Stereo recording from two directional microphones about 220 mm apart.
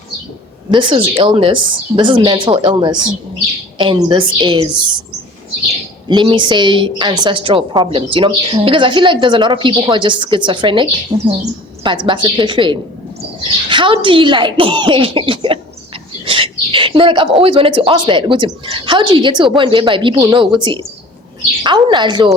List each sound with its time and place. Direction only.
0.7 s a woman's voice: 20° right (ahead or behind)
6.1 s a woman's voice: 20° right (ahead or behind)
16.2 s bird: 25° right (ahead or behind)
17.4 s a woman's voice: 25° right (ahead or behind)